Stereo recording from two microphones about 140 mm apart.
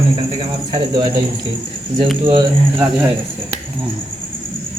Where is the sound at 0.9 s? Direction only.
30° right (ahead or behind).